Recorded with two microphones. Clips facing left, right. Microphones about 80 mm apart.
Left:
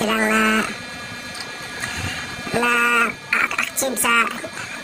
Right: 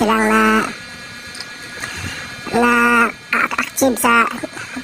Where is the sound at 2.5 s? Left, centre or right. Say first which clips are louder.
Right 5 dB; centre.